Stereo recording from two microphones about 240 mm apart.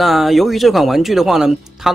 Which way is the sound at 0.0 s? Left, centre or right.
Centre.